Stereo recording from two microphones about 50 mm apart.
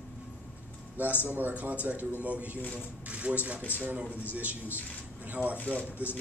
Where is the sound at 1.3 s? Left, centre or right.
Right.